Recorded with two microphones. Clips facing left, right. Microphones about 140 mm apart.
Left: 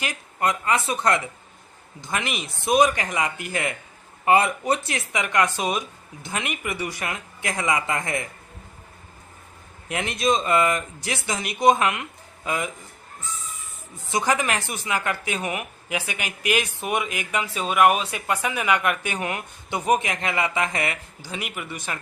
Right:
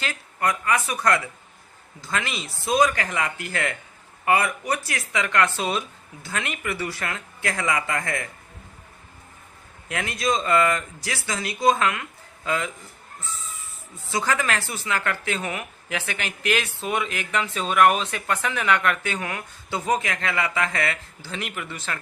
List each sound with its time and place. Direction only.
0.0 s speech: 20° left (ahead or behind)
9.9 s speech: 20° left (ahead or behind)
14.1 s speech: 20° left (ahead or behind)